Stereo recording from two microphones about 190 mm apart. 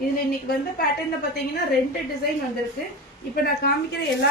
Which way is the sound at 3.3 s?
55° left (ahead or behind).